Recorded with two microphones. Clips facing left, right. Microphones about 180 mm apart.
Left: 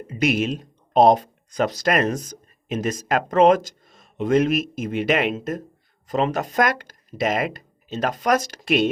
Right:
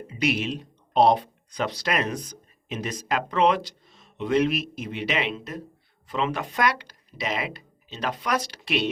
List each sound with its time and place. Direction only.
0.1 s speech: 45° left (ahead or behind)